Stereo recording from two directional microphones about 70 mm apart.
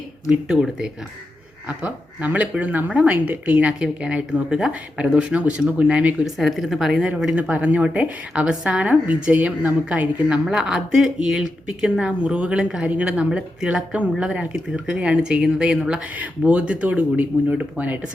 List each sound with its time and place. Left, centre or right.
0.3 s speech: centre
6.2 s speech: centre
7.3 s a woman's voice: centre